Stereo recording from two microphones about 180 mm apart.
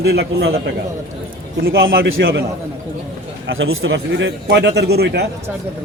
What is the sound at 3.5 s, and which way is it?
A man's voice, 90° right.